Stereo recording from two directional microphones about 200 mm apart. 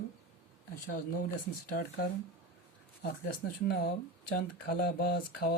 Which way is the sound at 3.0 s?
45° left (ahead or behind).